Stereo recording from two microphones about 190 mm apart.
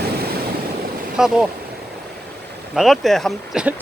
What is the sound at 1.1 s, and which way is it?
Speech, 5° right (ahead or behind).